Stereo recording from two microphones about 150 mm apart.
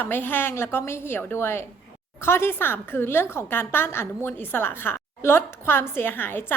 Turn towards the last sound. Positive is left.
turn(degrees=15)  # may be behind; listen again after turning